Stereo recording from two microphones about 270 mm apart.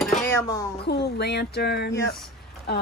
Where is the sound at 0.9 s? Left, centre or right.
Left.